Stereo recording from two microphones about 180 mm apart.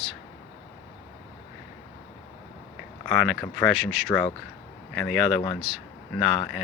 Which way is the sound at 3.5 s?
Centre (ahead or behind).